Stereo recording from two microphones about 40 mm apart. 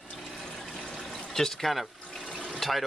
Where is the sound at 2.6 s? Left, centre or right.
Centre.